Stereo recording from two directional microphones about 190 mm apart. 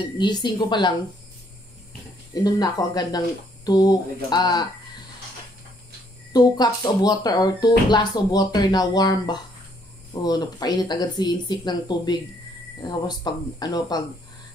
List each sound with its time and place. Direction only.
0.2 s speech: 20° left (ahead or behind)
2.3 s speech: 20° left (ahead or behind)
6.3 s speech: 20° left (ahead or behind)